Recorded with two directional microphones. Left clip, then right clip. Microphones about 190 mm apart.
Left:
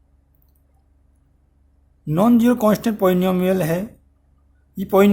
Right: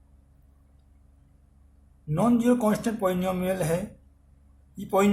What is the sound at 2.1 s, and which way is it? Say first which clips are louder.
A man's voice: left 7 dB; 50° left (ahead or behind).